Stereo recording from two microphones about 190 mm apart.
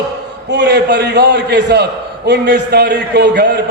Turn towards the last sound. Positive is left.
turn(degrees=-60)  # may be behind; listen again after turning